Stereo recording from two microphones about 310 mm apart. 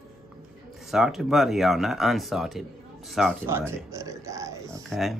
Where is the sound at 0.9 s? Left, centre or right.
Centre.